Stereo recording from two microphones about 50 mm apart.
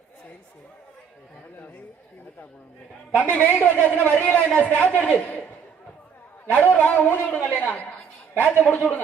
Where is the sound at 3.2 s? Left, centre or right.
Left.